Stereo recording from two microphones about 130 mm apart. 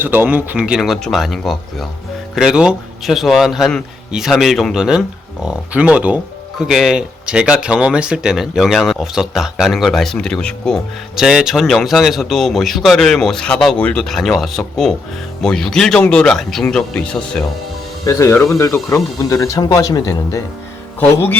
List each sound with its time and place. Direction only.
0.0 s speech: 15° right (ahead or behind); by 17.4 s 10° left (ahead or behind)
18.0 s speech: 25° left (ahead or behind)
21.0 s music: 15° left (ahead or behind)